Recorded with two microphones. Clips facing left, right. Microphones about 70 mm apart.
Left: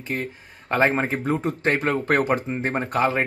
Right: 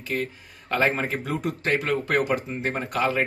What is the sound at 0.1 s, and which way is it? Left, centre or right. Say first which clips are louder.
Speech: even; left.